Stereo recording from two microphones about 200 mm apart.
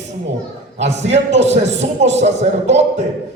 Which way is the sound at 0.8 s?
35° right (ahead or behind).